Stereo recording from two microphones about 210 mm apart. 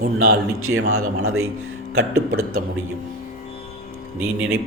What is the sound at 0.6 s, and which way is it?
Speech, 85° right.